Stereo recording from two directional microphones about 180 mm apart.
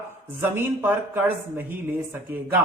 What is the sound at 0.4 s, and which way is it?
Speech, 10° right (ahead or behind).